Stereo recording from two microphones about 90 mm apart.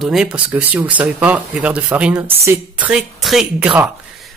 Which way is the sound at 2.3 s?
30° right (ahead or behind).